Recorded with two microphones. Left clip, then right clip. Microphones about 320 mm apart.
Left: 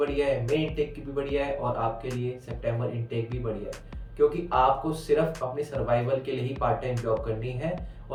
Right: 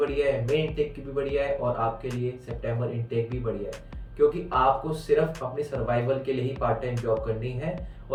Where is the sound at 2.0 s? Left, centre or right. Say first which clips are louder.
Right 1 dB; centre.